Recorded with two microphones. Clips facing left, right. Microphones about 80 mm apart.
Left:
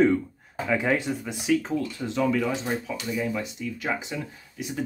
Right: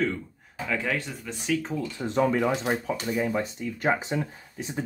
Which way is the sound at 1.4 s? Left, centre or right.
Centre.